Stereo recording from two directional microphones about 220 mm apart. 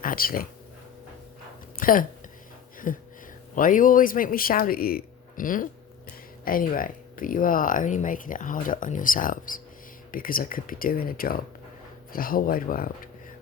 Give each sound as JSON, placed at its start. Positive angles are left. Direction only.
{"t": 0.0, "sound": "speech", "side_deg": 40}
{"t": 1.8, "sound": "speech", "side_deg": 40}
{"t": 2.7, "sound": "a sound", "side_deg": 40}
{"t": 3.5, "sound": "speech", "side_deg": 35}